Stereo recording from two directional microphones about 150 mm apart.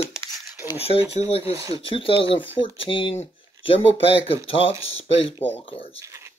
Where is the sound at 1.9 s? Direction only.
35° left (ahead or behind).